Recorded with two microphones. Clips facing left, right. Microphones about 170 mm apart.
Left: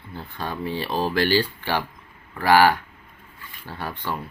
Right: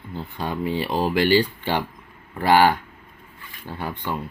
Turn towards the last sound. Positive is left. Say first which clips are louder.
# right 2 dB
turn(degrees=-15)  # may be behind; listen again after turning